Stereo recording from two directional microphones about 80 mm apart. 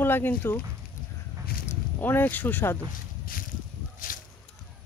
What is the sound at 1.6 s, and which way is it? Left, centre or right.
Speech, left.